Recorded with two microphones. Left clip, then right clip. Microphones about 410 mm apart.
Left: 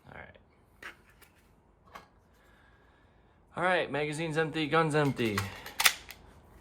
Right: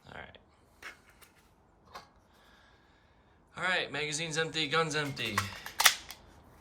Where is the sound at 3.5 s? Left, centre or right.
Centre.